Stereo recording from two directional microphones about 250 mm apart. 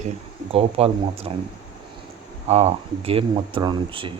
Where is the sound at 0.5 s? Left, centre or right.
Right.